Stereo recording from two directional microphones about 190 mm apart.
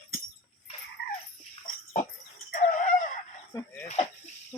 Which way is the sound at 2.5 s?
45° left (ahead or behind).